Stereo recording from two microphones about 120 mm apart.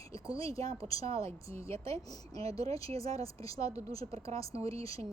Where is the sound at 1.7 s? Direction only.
25° left (ahead or behind).